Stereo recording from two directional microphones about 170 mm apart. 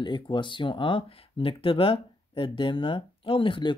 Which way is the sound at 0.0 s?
25° left (ahead or behind).